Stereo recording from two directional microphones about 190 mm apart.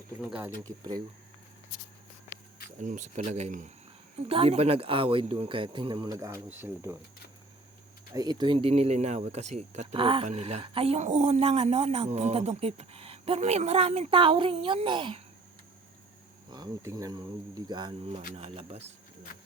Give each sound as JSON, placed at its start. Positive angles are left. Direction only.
{"t": 0.2, "sound": "speech", "side_deg": -5}
{"t": 2.7, "sound": "speech", "side_deg": -40}
{"t": 8.1, "sound": "speech", "side_deg": -20}
{"t": 16.5, "sound": "speech", "side_deg": -20}